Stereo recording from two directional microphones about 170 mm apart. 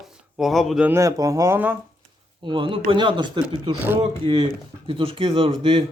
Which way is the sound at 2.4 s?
30° right (ahead or behind).